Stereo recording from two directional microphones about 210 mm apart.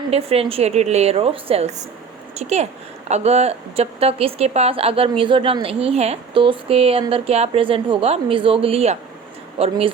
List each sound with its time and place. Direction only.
0.1 s speech: 30° right (ahead or behind)